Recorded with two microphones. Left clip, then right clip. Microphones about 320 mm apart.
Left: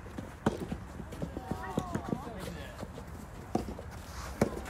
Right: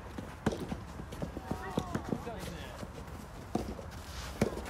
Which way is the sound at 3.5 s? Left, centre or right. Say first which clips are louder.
Left 2 dB; left.